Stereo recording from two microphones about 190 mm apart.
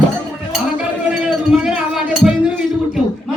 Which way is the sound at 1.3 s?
5° right (ahead or behind).